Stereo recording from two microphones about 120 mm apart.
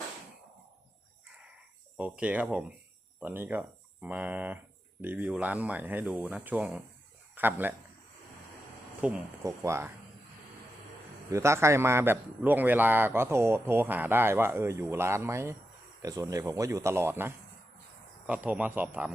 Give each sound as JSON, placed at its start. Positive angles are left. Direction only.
{"t": 2.0, "sound": "speech", "side_deg": -10}
{"t": 9.0, "sound": "speech", "side_deg": -10}
{"t": 9.4, "sound": "a man's voice", "side_deg": -25}
{"t": 11.3, "sound": "a man's voice", "side_deg": -25}